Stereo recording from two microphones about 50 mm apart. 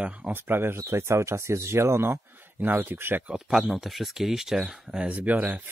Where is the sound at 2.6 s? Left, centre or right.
Right.